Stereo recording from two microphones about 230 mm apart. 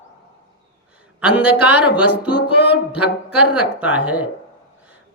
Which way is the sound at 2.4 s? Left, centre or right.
Left.